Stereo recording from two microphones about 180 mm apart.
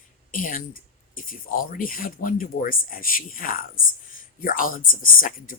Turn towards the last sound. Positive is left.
turn(degrees=50)  # may be behind; listen again after turning